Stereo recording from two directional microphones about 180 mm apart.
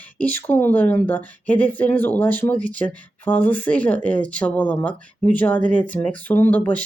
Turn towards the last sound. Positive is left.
turn(degrees=10)  # may be behind; listen again after turning